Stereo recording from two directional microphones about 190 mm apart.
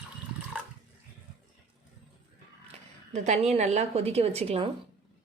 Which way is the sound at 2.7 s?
35° right (ahead or behind).